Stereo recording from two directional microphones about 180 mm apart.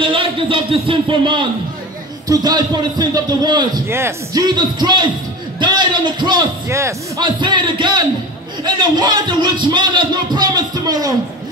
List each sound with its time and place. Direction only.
0.0 s a man's voice: 30° right (ahead or behind)